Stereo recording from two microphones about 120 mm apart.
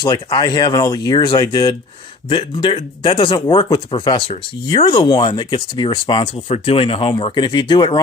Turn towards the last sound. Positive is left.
turn(degrees=40)  # may be behind; listen again after turning